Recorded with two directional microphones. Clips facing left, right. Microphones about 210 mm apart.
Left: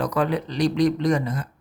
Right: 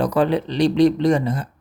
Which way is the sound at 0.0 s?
30° right (ahead or behind).